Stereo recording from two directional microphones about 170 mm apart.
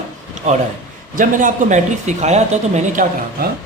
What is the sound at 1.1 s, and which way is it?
Speech, 50° right (ahead or behind).